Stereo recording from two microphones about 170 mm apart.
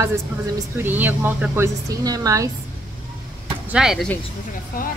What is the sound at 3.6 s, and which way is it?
Speech, 5° right (ahead or behind).